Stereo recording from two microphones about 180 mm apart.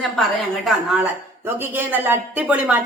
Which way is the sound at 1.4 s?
10° right (ahead or behind).